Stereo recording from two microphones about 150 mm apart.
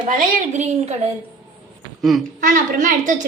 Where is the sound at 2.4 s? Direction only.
60° right (ahead or behind).